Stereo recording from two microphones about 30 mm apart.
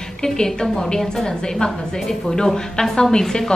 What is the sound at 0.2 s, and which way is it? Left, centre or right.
Speech, left.